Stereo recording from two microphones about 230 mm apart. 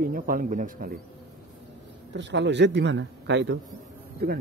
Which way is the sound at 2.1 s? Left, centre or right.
Right.